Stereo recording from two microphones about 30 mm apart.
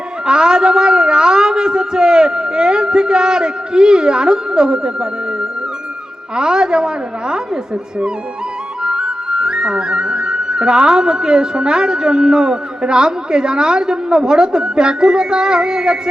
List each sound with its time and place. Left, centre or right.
0.3 s music: right
8.8 s music: right